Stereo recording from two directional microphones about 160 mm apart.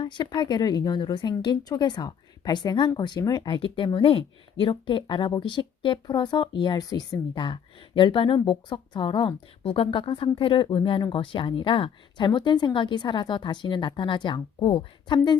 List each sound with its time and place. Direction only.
0.0 s a woman's voice: 30° left (ahead or behind)